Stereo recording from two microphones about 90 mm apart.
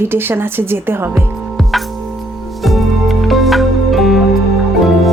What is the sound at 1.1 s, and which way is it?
Music, centre (ahead or behind).